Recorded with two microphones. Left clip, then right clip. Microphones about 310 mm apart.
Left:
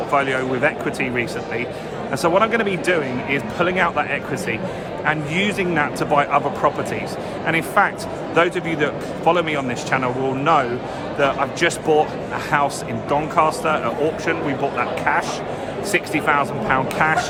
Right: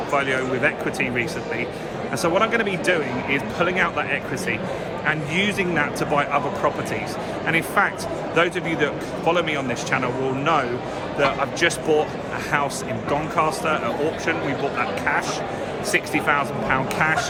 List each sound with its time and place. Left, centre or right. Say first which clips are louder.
0.1 s speech: left 2 dB; centre
2.2 s speech: left 3 dB; centre